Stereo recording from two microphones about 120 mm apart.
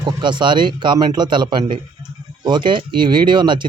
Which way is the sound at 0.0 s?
40° right (ahead or behind).